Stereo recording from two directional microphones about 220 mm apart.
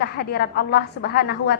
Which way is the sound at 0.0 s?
45° left (ahead or behind).